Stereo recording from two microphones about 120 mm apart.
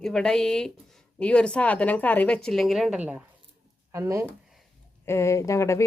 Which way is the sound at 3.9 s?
25° right (ahead or behind).